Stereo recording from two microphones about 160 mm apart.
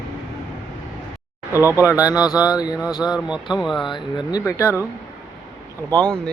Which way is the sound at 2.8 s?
5° right (ahead or behind).